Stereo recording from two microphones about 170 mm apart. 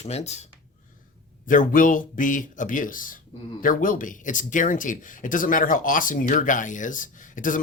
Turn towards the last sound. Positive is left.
turn(degrees=50)  # may be behind; listen again after turning